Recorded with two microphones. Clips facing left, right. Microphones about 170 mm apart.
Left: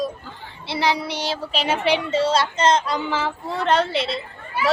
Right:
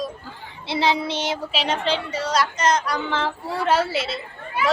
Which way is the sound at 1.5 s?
Centre (ahead or behind).